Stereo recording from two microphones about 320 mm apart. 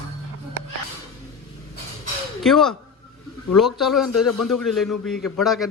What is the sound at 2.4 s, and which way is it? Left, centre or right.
A man's voice, centre.